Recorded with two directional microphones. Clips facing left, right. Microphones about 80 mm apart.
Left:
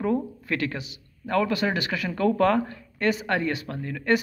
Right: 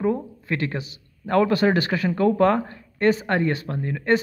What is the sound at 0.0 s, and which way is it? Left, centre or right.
Speech, right.